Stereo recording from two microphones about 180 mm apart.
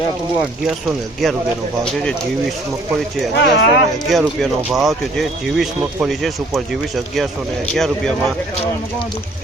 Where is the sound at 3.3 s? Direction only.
80° left.